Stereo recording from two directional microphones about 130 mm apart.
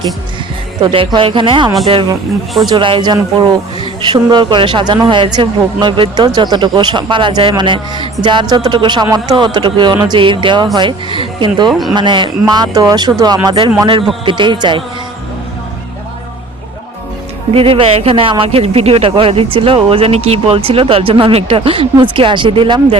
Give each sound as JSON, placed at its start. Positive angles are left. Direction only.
{"t": 0.8, "sound": "speech", "side_deg": -40}
{"t": 11.7, "sound": "speech", "side_deg": 0}
{"t": 11.9, "sound": "speech", "side_deg": -35}
{"t": 17.5, "sound": "speech", "side_deg": -45}